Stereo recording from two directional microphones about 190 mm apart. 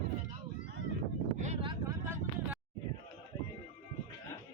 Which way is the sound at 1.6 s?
15° right (ahead or behind).